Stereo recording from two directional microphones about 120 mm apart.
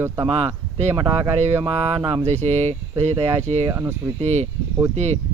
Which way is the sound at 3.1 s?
20° right (ahead or behind).